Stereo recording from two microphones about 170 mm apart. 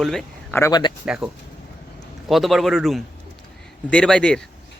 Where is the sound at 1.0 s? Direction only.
5° right (ahead or behind).